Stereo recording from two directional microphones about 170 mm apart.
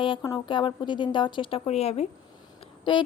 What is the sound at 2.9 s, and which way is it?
Speech, 25° left (ahead or behind).